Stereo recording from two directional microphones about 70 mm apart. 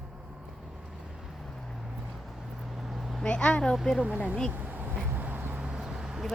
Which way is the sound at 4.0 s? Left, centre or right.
Centre.